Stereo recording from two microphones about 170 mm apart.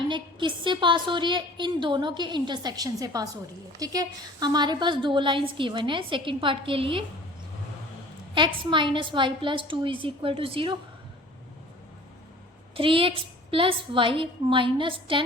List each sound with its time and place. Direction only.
0.1 s a woman's voice: 30° right (ahead or behind)
8.4 s a woman's voice: 30° right (ahead or behind)
12.7 s a woman's voice: 30° right (ahead or behind)